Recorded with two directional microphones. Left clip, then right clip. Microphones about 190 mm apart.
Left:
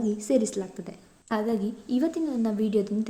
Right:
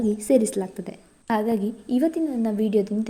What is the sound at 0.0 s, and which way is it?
A woman's voice, 20° right (ahead or behind).